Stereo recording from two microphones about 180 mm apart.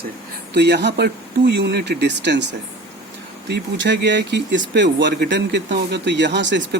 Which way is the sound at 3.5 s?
75° right (ahead or behind).